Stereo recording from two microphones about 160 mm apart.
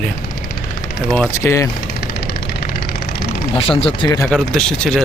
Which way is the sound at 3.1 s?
35° left (ahead or behind).